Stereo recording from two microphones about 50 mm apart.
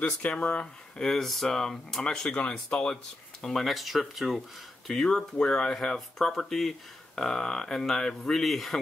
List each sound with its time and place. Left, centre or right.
0.4 s speech: left
0.9 s speech: centre
2.0 s speech: centre
3.4 s speech: centre
5.0 s speech: centre